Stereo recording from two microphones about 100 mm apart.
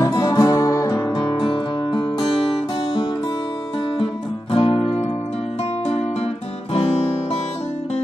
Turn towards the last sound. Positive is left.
turn(degrees=85)